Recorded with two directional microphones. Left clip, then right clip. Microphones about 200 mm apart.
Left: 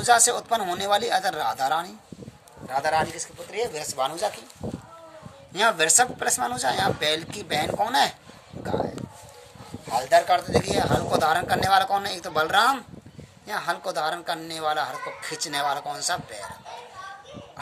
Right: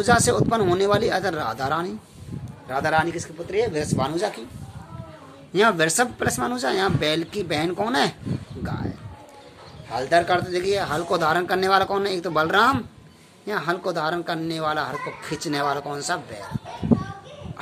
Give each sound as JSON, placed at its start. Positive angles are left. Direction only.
{"t": 0.0, "sound": "a man's voice", "side_deg": 40}
{"t": 5.5, "sound": "speech", "side_deg": 40}
{"t": 9.9, "sound": "speech", "side_deg": 45}